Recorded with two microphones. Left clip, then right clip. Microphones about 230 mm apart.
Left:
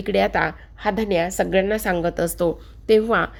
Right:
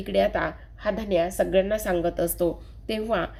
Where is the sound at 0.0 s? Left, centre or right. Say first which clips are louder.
Left 4 dB; left.